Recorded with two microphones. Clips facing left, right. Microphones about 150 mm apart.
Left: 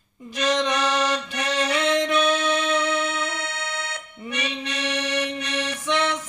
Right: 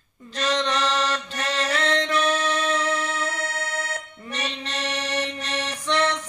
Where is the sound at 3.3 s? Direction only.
45° right (ahead or behind).